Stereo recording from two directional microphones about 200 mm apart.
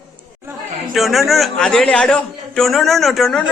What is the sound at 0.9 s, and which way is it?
A man's voice, centre (ahead or behind).